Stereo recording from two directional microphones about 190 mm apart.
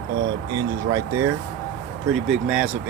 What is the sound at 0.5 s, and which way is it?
Speech, 20° right (ahead or behind).